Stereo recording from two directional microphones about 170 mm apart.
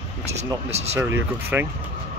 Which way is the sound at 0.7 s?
40° right (ahead or behind).